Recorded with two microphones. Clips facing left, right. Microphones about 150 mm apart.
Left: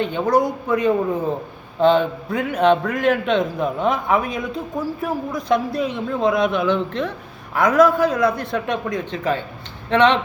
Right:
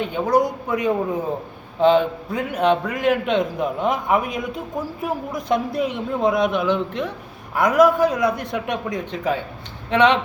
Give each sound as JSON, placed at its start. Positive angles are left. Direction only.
{"t": 0.0, "sound": "a man's voice", "side_deg": -10}